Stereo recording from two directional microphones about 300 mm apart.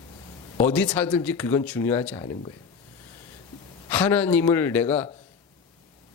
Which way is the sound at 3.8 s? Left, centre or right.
Centre.